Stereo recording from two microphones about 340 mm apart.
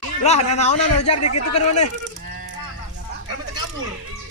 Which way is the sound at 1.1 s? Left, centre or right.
Left.